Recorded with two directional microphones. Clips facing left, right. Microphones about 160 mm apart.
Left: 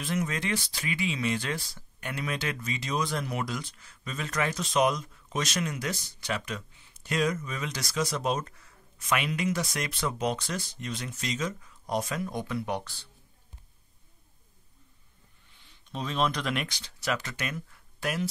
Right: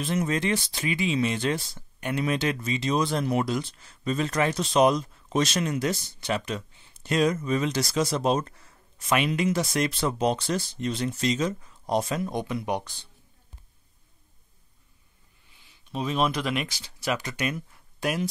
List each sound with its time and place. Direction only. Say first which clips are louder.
0.0 s speech: right 5 dB; 30° right (ahead or behind)
15.9 s speech: right 3 dB; 10° right (ahead or behind)